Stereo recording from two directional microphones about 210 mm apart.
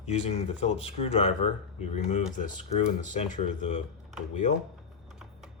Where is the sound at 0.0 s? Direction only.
30° left (ahead or behind).